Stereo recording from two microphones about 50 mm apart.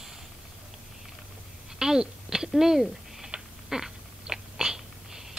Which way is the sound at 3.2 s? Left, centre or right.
Centre.